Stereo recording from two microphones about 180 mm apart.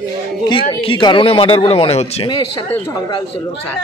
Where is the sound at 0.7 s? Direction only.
25° left (ahead or behind).